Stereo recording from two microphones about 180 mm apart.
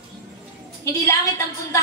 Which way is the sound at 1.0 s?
15° left (ahead or behind).